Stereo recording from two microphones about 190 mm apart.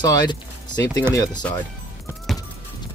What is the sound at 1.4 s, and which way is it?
Speech, 10° left (ahead or behind).